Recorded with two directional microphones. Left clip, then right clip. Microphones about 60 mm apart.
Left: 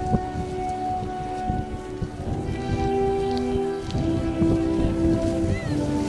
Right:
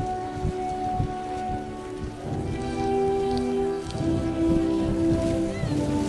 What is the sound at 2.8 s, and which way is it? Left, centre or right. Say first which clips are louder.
Music: left 1 dB; left.